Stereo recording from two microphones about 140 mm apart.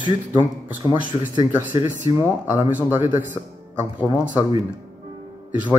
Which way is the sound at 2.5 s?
15° right (ahead or behind).